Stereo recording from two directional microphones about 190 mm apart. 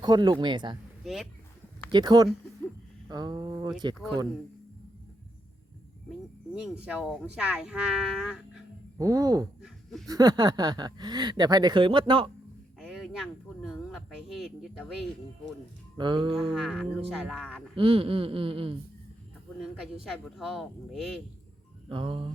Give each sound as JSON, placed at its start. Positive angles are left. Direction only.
{"t": 0.0, "sound": "speech", "side_deg": -20}
{"t": 1.0, "sound": "speech", "side_deg": 0}
{"t": 1.9, "sound": "speech", "side_deg": -20}
{"t": 6.1, "sound": "speech", "side_deg": -5}
{"t": 9.0, "sound": "speech", "side_deg": -20}
{"t": 9.6, "sound": "a sound", "side_deg": 0}
{"t": 10.1, "sound": "speech", "side_deg": -20}
{"t": 12.8, "sound": "speech", "side_deg": 0}
{"t": 16.0, "sound": "speech", "side_deg": -25}
{"t": 16.3, "sound": "speech", "side_deg": 0}
{"t": 17.7, "sound": "speech", "side_deg": -30}
{"t": 20.1, "sound": "speech", "side_deg": 0}
{"t": 21.8, "sound": "speech", "side_deg": -25}